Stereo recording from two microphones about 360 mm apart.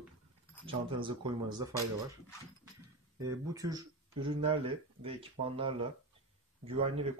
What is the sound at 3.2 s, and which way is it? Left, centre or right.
Speech, centre.